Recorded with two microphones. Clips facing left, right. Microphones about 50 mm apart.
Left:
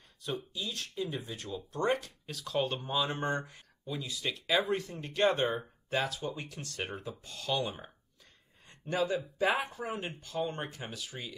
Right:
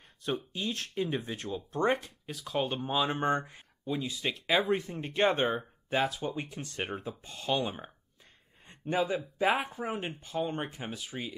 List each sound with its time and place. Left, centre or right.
0.2 s speech: right